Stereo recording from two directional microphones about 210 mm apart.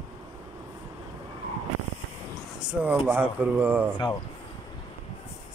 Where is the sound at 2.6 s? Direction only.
5° right (ahead or behind).